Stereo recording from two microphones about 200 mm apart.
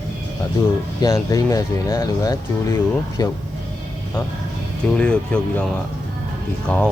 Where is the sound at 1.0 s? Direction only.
15° left (ahead or behind).